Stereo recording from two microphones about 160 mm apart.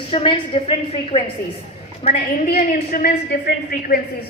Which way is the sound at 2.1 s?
60° left (ahead or behind).